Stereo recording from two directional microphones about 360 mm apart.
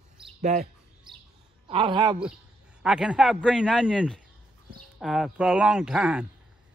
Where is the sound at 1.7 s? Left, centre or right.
Centre.